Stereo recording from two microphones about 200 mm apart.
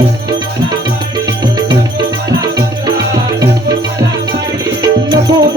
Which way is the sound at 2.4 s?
20° right (ahead or behind).